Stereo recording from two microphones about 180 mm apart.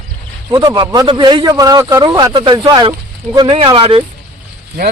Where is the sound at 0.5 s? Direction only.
25° right (ahead or behind).